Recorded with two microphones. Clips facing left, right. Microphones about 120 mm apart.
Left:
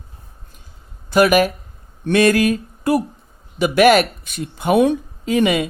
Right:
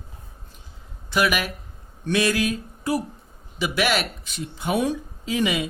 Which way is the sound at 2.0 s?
55° left (ahead or behind).